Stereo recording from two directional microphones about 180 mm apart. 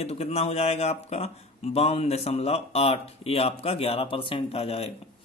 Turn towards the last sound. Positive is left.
turn(degrees=35)  # may be behind; listen again after turning